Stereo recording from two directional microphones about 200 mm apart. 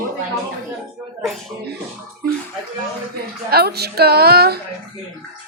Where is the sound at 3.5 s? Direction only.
50° right (ahead or behind).